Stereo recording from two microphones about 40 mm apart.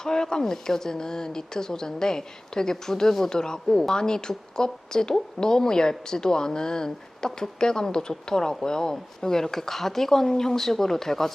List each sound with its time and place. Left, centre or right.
0.0 s a woman's voice: centre